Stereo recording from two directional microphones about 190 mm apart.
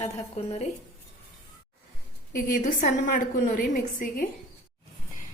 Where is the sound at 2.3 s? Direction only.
45° left (ahead or behind).